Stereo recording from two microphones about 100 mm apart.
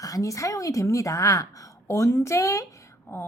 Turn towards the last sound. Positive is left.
turn(degrees=25)  # may be behind; listen again after turning